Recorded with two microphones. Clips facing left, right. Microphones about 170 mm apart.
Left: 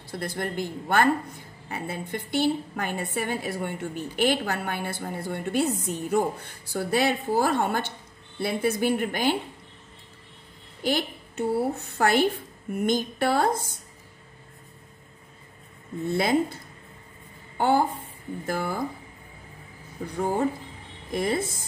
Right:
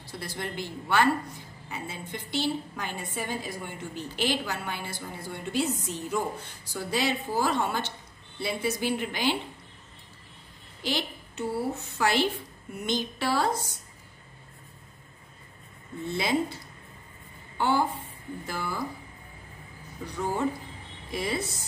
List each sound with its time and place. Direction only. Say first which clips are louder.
0.1 s a woman's voice: left 5 dB; 55° left (ahead or behind)
10.8 s a sound: left 5 dB; 55° left (ahead or behind)
11.5 s a woman's voice: left 4 dB; 55° left (ahead or behind)
16.1 s a woman's voice: left 4 dB; 55° left (ahead or behind)
17.6 s a woman's voice: left 3 dB; 50° left (ahead or behind)
20.1 s a woman's voice: left 3 dB; 50° left (ahead or behind)